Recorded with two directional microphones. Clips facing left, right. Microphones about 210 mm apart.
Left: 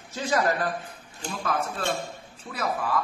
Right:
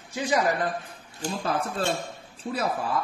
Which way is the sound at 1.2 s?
30° right (ahead or behind).